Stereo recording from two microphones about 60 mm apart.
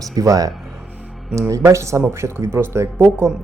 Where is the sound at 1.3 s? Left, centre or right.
Right.